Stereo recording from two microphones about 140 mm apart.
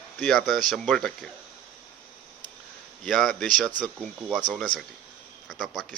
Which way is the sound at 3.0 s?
Centre (ahead or behind).